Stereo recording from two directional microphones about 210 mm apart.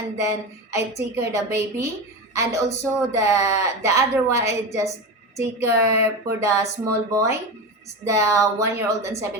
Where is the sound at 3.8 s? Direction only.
15° right (ahead or behind).